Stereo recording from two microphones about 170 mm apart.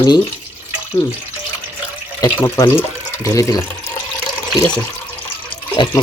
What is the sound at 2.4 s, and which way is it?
Speech, 15° left (ahead or behind).